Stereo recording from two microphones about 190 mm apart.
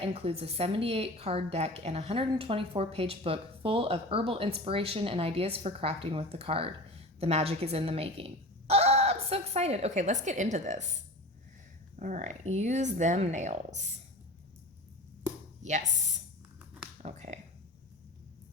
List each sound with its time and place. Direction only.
0.0 s a woman's voice: 30° right (ahead or behind)
11.9 s a woman's voice: 40° right (ahead or behind)
15.6 s a woman's voice: 40° right (ahead or behind)